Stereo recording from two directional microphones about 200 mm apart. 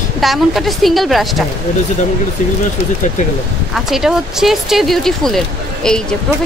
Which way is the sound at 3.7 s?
Centre (ahead or behind).